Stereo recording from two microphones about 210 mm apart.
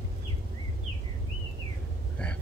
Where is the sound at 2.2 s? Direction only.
5° left (ahead or behind).